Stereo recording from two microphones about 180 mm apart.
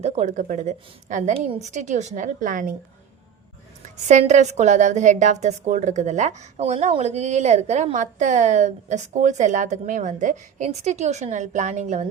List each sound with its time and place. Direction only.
0.0 s a woman's voice: 40° right (ahead or behind)
3.8 s a woman's voice: 40° right (ahead or behind)